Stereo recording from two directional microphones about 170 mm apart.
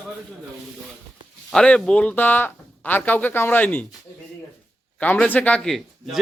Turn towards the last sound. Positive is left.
turn(degrees=0)  # may be behind; listen again after turning